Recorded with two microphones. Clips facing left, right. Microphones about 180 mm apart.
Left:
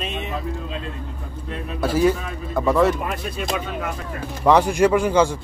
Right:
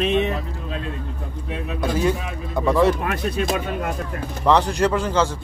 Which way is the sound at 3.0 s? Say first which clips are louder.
Right 4 dB; 75° right (ahead or behind).